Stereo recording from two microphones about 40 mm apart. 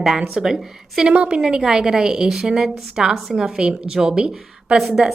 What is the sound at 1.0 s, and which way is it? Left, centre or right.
Speech, right.